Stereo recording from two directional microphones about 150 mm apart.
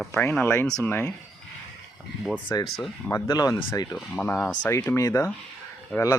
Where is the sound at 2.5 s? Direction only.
25° left (ahead or behind).